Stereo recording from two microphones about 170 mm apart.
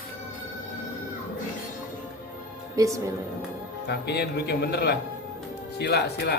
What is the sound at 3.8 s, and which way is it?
Speech, 75° left (ahead or behind).